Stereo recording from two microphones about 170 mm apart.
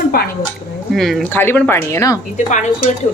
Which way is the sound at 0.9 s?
Centre (ahead or behind).